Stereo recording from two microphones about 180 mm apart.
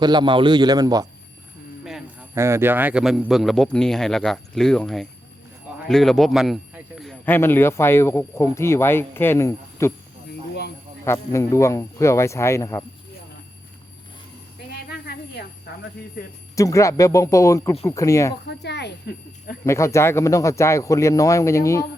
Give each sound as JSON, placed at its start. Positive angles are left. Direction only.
{"t": 0.0, "sound": "a man's voice", "side_deg": -25}
{"t": 2.3, "sound": "a man's voice", "side_deg": -15}
{"t": 11.0, "sound": "a man's voice", "side_deg": 15}
{"t": 14.8, "sound": "a sound", "side_deg": 60}
{"t": 16.2, "sound": "speech", "side_deg": 60}
{"t": 16.6, "sound": "a man's voice", "side_deg": 15}
{"t": 18.4, "sound": "speech", "side_deg": 70}
{"t": 19.6, "sound": "a man's voice", "side_deg": 15}